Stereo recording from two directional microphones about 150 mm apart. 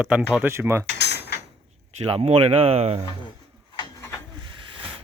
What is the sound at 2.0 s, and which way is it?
Speech, 40° right (ahead or behind).